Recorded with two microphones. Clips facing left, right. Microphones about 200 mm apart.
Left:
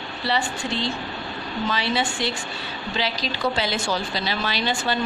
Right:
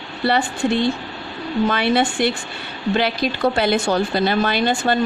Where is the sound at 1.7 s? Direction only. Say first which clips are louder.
Right 4 dB; 55° right (ahead or behind).